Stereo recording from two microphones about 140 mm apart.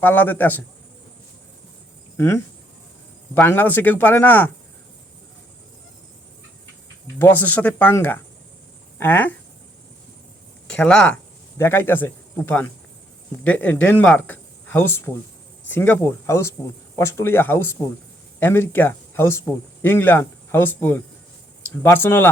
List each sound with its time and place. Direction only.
0.0 s speech: 15° left (ahead or behind)
2.1 s speech: 20° left (ahead or behind)
7.2 s speech: 10° left (ahead or behind)
10.7 s speech: 5° left (ahead or behind)
11.5 s speech: 20° left (ahead or behind)